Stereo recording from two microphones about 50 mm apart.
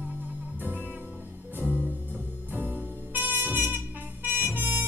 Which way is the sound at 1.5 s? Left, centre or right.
Right.